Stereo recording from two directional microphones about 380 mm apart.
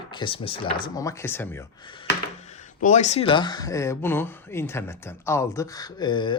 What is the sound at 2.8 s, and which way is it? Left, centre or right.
Speech, centre.